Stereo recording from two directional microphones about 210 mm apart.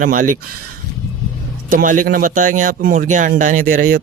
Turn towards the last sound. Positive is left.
turn(degrees=-40)  # may be behind; listen again after turning